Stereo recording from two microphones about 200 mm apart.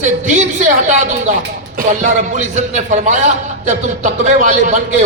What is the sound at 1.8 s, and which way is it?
A man's voice, 40° right (ahead or behind).